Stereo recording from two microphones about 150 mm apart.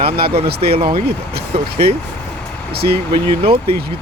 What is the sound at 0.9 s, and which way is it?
Speech, 90° right.